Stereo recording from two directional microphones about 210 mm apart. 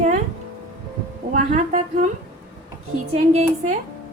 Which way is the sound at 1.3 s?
35° right (ahead or behind).